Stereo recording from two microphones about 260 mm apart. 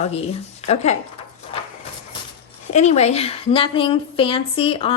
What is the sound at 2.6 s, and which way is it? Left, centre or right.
A woman's voice, left.